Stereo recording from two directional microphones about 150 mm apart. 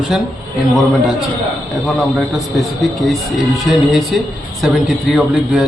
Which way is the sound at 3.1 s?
Centre (ahead or behind).